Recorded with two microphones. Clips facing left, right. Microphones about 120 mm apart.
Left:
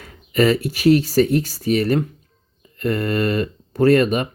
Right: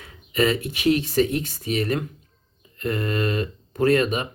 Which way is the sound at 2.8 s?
50° left (ahead or behind).